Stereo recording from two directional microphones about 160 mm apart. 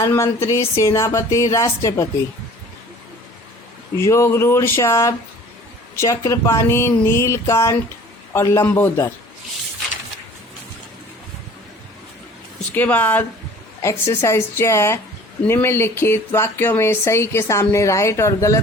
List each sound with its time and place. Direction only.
0.0 s speech: 15° left (ahead or behind)
3.9 s speech: 15° left (ahead or behind)
12.7 s speech: 10° left (ahead or behind)